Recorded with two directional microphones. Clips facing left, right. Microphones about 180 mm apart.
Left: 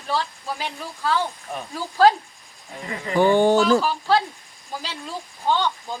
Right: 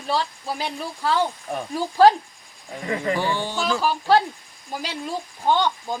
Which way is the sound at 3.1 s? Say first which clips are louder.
Left 9 dB; 50° left (ahead or behind).